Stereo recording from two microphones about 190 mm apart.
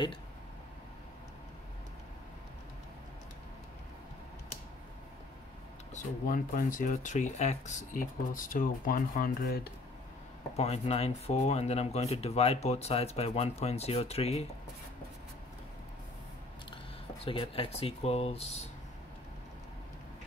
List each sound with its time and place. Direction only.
5.9 s speech: 45° left (ahead or behind)
10.5 s speech: 35° left (ahead or behind)
16.7 s speech: 30° left (ahead or behind)